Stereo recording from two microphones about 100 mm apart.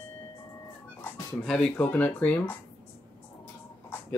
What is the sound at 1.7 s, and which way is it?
Speech, 15° left (ahead or behind).